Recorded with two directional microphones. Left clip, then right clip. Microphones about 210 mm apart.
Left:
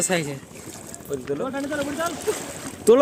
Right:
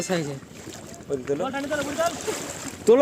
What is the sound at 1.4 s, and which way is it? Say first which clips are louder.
Speech: even; 30° right (ahead or behind).